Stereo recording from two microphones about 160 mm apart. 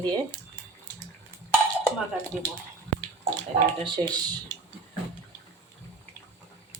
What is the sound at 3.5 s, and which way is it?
Speech, 30° right (ahead or behind).